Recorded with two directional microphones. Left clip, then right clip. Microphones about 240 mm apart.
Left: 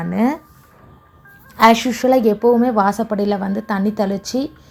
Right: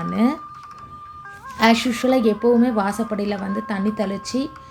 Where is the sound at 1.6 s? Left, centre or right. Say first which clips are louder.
Left 5 dB; centre.